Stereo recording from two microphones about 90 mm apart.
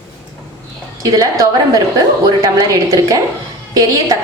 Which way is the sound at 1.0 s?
40° right (ahead or behind).